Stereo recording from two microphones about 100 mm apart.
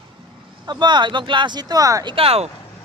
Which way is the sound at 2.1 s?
80° right.